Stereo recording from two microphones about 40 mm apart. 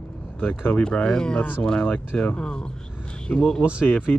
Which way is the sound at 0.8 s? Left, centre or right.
Left.